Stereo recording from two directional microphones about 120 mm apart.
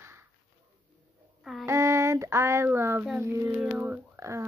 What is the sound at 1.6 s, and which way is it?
Speech, 25° right (ahead or behind).